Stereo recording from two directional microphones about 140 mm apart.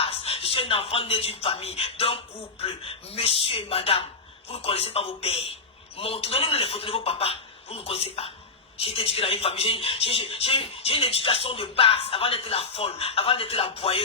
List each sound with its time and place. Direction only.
0.0 s speech: 45° left (ahead or behind)